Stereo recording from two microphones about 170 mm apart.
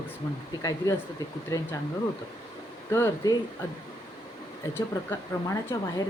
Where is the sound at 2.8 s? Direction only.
15° left (ahead or behind).